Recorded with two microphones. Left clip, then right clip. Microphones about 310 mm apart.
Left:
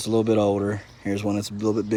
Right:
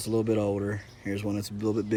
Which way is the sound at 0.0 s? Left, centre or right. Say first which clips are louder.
Left 6 dB; centre.